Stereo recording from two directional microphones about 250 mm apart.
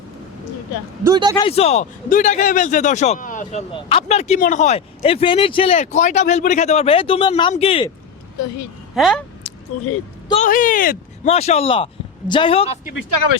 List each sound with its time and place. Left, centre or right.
1.0 s a man's voice: centre
1.4 s speech: left
3.7 s speech: left
9.0 s speech: centre
9.7 s speech: left
10.2 s speech: left